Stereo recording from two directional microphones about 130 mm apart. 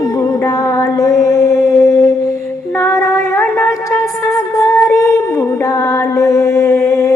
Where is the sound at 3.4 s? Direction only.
15° left (ahead or behind).